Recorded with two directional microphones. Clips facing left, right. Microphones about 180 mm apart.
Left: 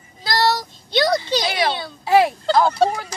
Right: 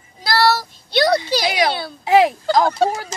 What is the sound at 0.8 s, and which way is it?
Speech, 10° right (ahead or behind).